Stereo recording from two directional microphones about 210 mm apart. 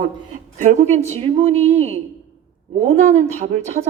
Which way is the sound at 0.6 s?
35° right (ahead or behind).